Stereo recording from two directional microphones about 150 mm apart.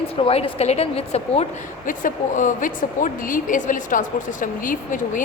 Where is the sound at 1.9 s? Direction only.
60° left (ahead or behind).